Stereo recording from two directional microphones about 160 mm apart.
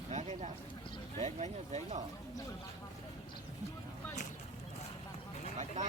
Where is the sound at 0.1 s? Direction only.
45° right (ahead or behind).